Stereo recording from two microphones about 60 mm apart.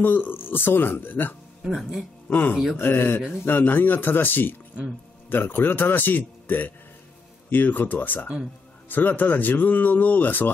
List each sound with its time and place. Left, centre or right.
0.0 s speech: left
1.6 s speech: centre
2.2 s speech: left